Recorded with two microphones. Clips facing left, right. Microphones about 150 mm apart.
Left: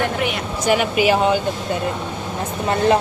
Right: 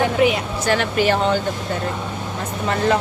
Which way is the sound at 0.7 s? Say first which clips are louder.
Left 2 dB; 10° left (ahead or behind).